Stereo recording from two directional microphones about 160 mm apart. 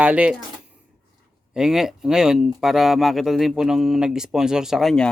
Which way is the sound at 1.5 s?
5° right (ahead or behind).